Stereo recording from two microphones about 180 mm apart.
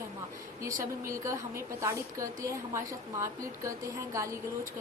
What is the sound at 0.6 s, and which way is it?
A woman's voice, 15° right (ahead or behind).